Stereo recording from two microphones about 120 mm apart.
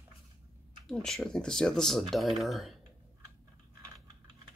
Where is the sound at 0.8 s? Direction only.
5° left (ahead or behind).